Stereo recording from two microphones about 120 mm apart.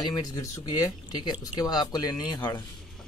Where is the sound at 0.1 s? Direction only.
30° left (ahead or behind).